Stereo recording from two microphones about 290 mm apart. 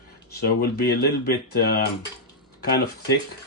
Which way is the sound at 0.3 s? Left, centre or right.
Left.